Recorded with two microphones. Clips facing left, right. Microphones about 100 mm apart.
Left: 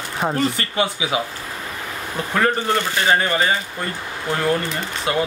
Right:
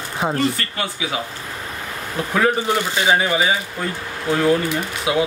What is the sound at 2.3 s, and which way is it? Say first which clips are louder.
Speech: right 1 dB; 5° right (ahead or behind).